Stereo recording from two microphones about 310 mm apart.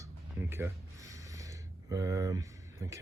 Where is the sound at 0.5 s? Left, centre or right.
Centre.